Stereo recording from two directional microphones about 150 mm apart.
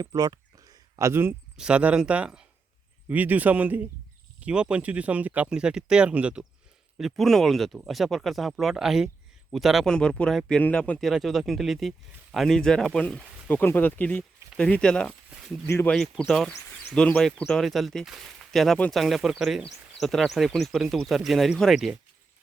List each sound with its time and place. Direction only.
0.0 s speech: 25° right (ahead or behind); by 15.1 s 5° left (ahead or behind)
15.3 s a sound: 5° right (ahead or behind)
15.6 s speech: 15° left (ahead or behind)
16.1 s speech: 5° left (ahead or behind)